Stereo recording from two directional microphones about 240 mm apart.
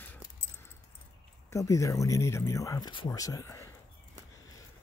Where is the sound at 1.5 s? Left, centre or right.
Centre.